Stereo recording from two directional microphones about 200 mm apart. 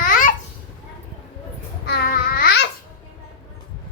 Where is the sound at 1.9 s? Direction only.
45° left (ahead or behind).